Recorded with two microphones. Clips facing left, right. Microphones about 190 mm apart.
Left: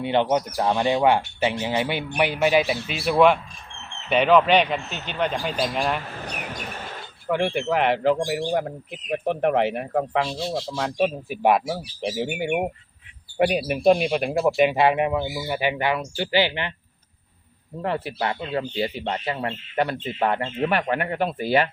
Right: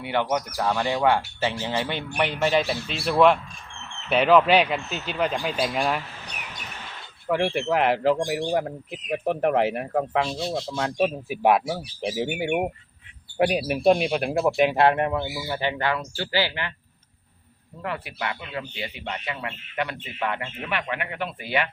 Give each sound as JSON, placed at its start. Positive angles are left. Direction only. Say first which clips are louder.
{"t": 0.0, "sound": "a man's voice", "louder": "left 4 dB", "side_deg": 25}
{"t": 6.2, "sound": "bird", "louder": "left 7 dB", "side_deg": 50}
{"t": 7.3, "sound": "a man's voice", "louder": "even", "side_deg": 0}
{"t": 17.8, "sound": "speech", "louder": "left 5 dB", "side_deg": 30}